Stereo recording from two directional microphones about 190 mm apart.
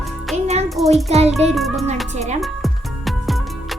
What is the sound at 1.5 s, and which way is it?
Music, centre (ahead or behind).